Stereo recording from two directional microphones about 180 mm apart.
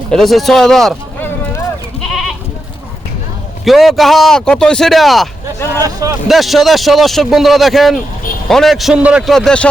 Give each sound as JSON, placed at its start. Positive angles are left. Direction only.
{"t": 0.1, "sound": "speech", "side_deg": 0}
{"t": 2.0, "sound": "goat", "side_deg": 0}
{"t": 3.6, "sound": "a man's voice", "side_deg": 0}
{"t": 5.8, "sound": "speech", "side_deg": -20}
{"t": 6.2, "sound": "a man's voice", "side_deg": 0}